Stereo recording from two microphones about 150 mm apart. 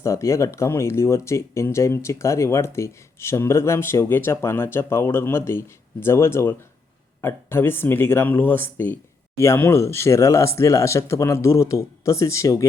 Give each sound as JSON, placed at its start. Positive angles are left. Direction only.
{"t": 0.0, "sound": "speech", "side_deg": 20}